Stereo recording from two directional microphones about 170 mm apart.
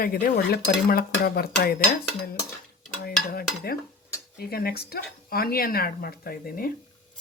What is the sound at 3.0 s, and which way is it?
Cutlery, 65° left (ahead or behind).